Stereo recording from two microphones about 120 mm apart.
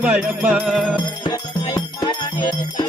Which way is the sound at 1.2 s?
40° left (ahead or behind).